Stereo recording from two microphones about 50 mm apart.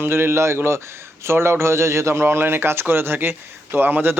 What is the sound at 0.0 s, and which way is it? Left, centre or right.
A man's voice, right.